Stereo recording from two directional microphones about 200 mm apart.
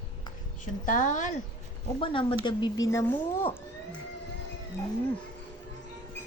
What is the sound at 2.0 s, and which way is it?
Speech, 25° left (ahead or behind).